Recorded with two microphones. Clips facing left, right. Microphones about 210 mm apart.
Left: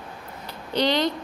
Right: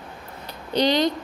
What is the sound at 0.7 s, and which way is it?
Speech, 15° right (ahead or behind).